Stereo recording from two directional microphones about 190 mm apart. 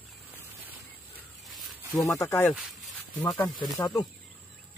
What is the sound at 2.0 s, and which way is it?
Speech, 15° left (ahead or behind).